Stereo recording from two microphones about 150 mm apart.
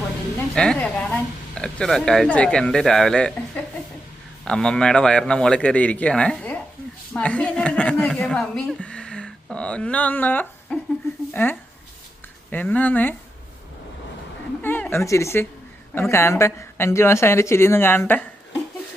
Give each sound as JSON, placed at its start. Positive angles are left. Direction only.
{"t": 0.5, "sound": "a woman's voice", "side_deg": 5}
{"t": 14.6, "sound": "speech", "side_deg": 15}